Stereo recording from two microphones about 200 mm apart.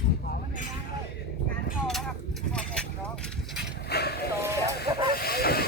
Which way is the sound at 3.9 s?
55° left (ahead or behind).